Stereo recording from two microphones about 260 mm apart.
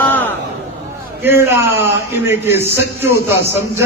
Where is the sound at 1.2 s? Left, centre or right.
Centre.